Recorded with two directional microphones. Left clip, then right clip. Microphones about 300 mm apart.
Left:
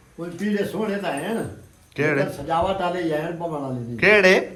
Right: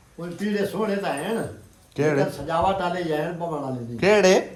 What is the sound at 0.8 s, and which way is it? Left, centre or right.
Speech, centre.